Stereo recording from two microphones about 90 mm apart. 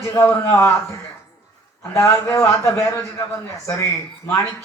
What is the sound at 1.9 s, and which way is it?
Speech, 25° left (ahead or behind).